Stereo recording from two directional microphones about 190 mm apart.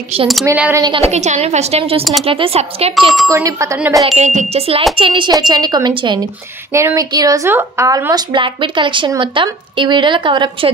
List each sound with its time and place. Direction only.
0.5 s speech: 15° right (ahead or behind)
0.8 s a woman's voice: 30° right (ahead or behind)
3.3 s speech: 15° right (ahead or behind)
4.2 s a woman's voice: 35° right (ahead or behind)